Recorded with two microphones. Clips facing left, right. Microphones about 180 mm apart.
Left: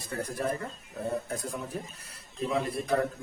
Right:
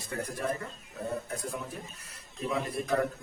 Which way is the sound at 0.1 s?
35° left (ahead or behind).